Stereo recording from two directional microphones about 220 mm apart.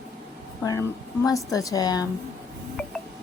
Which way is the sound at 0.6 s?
15° left (ahead or behind).